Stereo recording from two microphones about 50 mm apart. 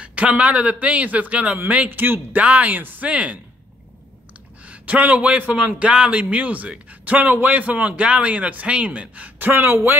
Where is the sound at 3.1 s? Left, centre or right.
Right.